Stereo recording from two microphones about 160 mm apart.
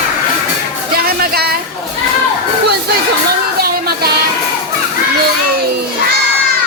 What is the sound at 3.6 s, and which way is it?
Music, 75° right (ahead or behind).